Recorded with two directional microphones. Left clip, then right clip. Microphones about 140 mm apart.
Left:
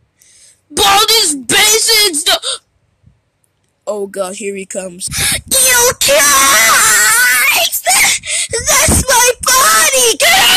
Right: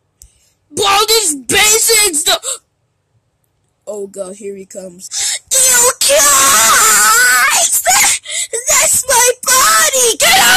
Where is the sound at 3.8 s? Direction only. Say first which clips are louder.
Left 5 dB; 15° left (ahead or behind).